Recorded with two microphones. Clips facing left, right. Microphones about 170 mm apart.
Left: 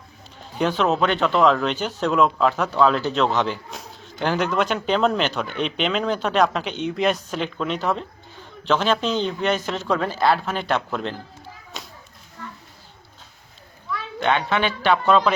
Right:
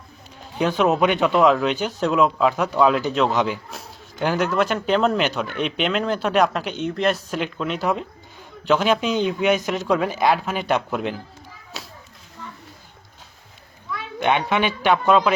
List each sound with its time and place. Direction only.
0.6 s speech: 10° right (ahead or behind)
14.2 s speech: 15° right (ahead or behind)